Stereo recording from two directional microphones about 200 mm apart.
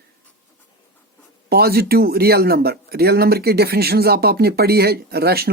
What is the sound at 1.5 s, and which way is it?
Speech, 50° right (ahead or behind).